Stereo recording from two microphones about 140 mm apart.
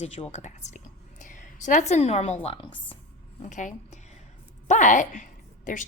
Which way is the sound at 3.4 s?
60° left (ahead or behind).